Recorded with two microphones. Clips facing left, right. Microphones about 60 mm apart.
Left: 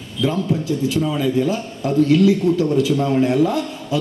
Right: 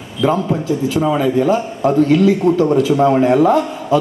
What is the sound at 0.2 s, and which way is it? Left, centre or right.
A man's voice, right.